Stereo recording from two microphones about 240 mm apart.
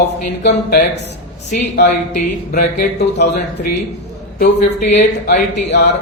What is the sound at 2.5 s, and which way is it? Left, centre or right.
Speech, left.